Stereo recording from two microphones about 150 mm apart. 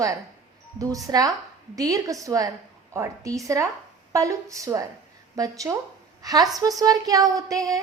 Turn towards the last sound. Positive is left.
turn(degrees=-25)  # may be behind; listen again after turning